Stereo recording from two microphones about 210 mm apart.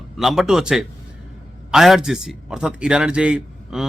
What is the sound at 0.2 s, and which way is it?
A man's voice, centre (ahead or behind).